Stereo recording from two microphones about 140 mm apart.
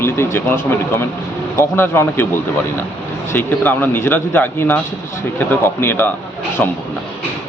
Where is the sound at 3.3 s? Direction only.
15° left (ahead or behind).